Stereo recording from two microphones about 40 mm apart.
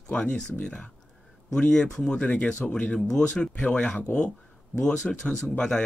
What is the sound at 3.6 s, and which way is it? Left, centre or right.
Speech, left.